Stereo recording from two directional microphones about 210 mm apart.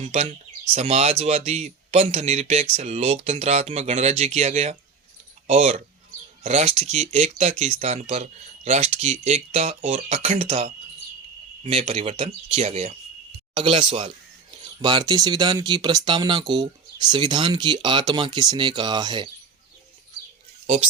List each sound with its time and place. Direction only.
0.0 s speech: 30° right (ahead or behind)